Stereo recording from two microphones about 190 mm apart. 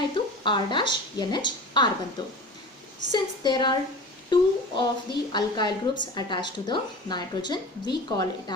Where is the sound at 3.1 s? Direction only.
25° left (ahead or behind).